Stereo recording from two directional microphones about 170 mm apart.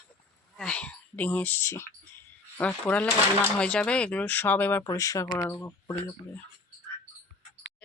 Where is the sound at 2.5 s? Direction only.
10° left (ahead or behind).